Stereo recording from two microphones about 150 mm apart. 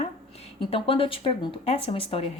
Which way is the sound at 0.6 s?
35° left (ahead or behind).